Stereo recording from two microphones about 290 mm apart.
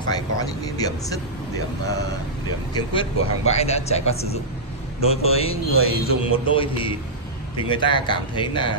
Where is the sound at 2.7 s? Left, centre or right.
Centre.